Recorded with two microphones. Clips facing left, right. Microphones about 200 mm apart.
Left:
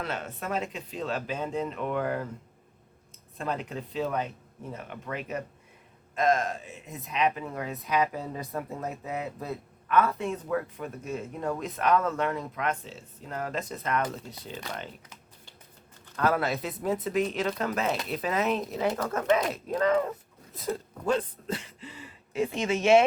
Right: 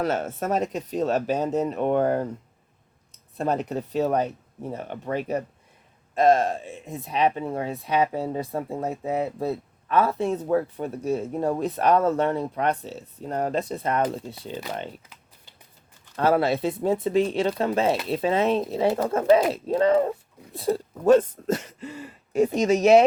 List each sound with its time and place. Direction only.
0.0 s speech: 45° right (ahead or behind)
3.3 s speech: 40° right (ahead or behind)
16.1 s speech: 30° right (ahead or behind)
21.1 s speech: 45° right (ahead or behind)